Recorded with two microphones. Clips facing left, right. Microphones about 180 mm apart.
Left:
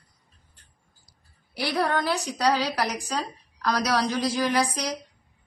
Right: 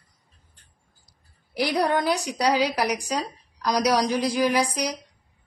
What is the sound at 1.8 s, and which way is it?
A woman's voice, 15° right (ahead or behind).